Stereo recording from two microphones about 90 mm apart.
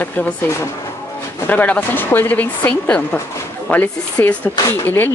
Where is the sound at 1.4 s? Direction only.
15° left (ahead or behind).